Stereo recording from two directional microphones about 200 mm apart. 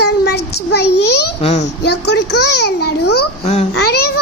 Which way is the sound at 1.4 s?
35° left (ahead or behind).